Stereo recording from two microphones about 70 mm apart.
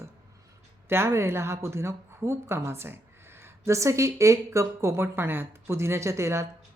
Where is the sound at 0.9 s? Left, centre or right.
Right.